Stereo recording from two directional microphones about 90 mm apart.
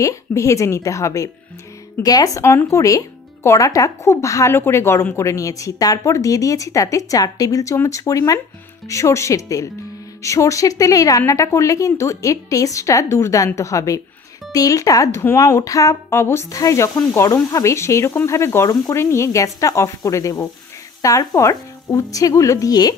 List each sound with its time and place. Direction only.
0.0 s a woman's voice: 35° left (ahead or behind)
16.4 s a woman's voice: 40° left (ahead or behind)